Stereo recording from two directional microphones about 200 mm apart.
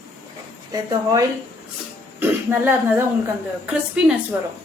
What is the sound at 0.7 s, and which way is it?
Speech, 20° right (ahead or behind).